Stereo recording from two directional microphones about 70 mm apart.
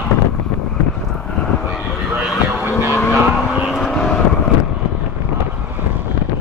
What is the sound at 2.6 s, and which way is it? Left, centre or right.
Vehicle, right.